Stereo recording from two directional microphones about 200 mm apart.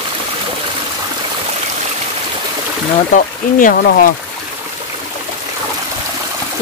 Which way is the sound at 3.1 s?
40° left (ahead or behind).